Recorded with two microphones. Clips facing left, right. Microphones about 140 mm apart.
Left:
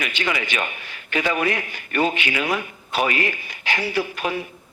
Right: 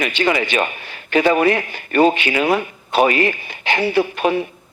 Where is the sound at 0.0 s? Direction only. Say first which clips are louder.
Right 7 dB; 35° right (ahead or behind).